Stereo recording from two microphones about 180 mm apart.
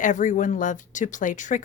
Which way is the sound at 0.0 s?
45° left (ahead or behind).